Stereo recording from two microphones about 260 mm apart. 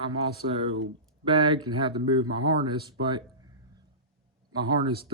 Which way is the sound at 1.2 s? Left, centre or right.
Centre.